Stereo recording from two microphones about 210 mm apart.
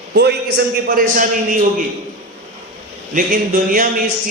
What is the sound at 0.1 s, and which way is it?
Speech, 50° right (ahead or behind).